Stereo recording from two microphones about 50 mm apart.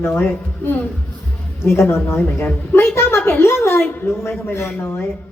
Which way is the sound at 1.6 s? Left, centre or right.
Left.